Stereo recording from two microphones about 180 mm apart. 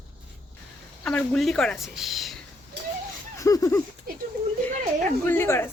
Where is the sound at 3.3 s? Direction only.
20° left (ahead or behind).